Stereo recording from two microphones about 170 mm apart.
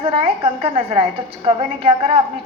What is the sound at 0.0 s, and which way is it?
A woman's voice, 35° right (ahead or behind).